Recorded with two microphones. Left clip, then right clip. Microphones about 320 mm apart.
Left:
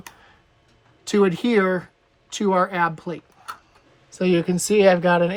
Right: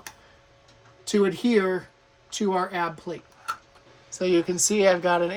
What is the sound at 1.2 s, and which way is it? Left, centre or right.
Speech, centre.